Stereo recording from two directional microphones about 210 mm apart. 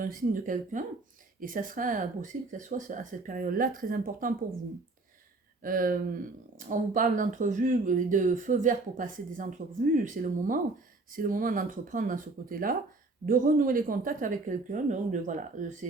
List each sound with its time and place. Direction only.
0.0 s speech: 40° right (ahead or behind)
5.6 s speech: 40° right (ahead or behind)